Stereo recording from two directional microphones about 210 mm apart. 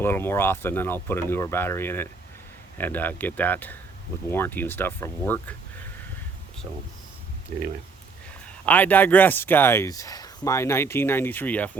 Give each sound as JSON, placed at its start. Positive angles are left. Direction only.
{"t": 0.0, "sound": "speech", "side_deg": 10}
{"t": 8.6, "sound": "speech", "side_deg": 10}